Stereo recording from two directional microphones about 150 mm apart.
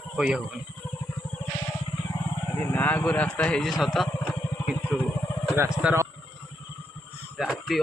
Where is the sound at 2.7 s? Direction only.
10° left (ahead or behind).